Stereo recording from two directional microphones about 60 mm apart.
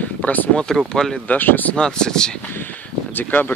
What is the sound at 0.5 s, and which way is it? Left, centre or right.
Speech, centre.